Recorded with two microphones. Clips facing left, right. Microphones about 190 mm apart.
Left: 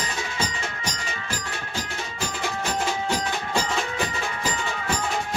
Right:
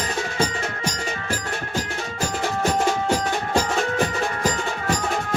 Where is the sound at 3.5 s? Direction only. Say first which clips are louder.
Right 5 dB; 45° right (ahead or behind).